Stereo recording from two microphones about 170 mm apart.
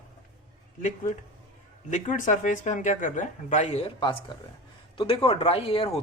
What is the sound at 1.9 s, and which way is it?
Speech, 45° left (ahead or behind).